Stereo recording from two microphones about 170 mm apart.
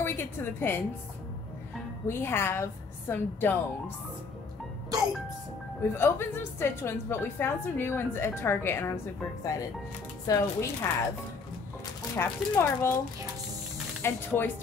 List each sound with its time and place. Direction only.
0.0 s a woman's voice: 15° left (ahead or behind)
2.0 s a woman's voice: 15° left (ahead or behind)
5.9 s a woman's voice: 15° left (ahead or behind)
12.2 s a woman's voice: 15° left (ahead or behind)
14.0 s a woman's voice: 15° left (ahead or behind)